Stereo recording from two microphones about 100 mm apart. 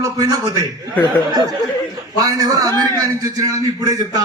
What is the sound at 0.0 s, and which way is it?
A man's voice, 35° right (ahead or behind).